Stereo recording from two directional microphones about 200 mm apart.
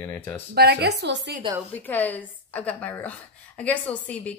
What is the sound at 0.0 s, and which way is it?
Speech, 10° left (ahead or behind).